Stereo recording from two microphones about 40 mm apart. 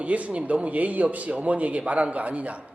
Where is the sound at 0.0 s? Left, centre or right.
Right.